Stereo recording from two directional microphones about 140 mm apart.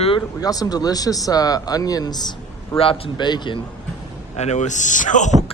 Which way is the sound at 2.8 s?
40° left (ahead or behind).